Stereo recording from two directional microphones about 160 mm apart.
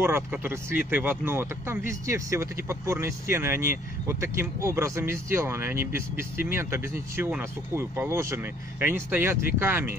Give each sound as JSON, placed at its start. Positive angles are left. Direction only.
{"t": 0.0, "sound": "speech", "side_deg": -15}